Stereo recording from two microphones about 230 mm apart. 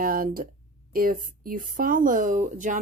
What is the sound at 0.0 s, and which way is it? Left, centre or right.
Speech, right.